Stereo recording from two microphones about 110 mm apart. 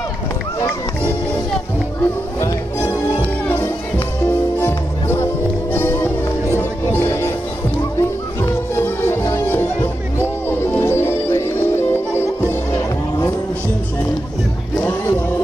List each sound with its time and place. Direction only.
0.6 s music: 25° left (ahead or behind)
4.2 s music: 20° left (ahead or behind)